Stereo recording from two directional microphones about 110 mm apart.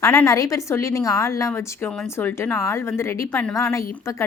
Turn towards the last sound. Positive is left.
turn(degrees=25)  # may be behind; listen again after turning